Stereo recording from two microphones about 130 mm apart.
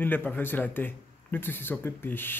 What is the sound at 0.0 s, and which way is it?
Speech, 15° left (ahead or behind).